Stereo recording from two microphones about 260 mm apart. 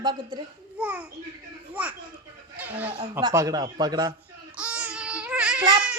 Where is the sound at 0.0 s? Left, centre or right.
Centre.